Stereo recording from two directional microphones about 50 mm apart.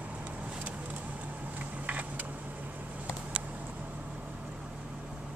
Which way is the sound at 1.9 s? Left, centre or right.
Right.